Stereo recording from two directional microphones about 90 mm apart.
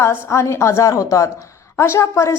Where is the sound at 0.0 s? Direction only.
30° left (ahead or behind).